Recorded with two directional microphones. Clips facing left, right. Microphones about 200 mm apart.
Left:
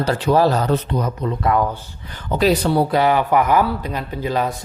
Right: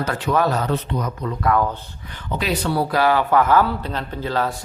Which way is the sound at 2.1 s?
40° left (ahead or behind).